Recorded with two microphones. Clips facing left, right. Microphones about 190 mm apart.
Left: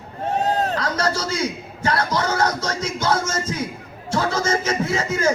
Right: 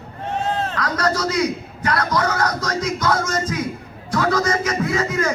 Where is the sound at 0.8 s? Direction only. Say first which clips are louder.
Right 2 dB; 25° left (ahead or behind).